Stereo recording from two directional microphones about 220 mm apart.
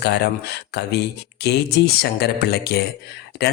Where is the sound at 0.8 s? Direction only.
50° left (ahead or behind).